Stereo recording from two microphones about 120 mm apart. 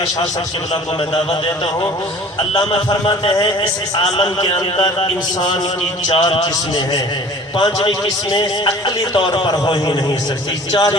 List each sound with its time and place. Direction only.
2.5 s a man's voice: 50° left (ahead or behind)
4.0 s a man's voice: 55° left (ahead or behind); by 10.9 s 35° left (ahead or behind)